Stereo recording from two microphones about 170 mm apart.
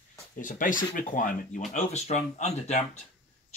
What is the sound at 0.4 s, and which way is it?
Speech, 50° left (ahead or behind).